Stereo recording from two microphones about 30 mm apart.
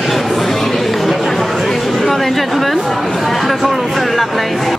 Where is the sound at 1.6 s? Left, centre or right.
Centre.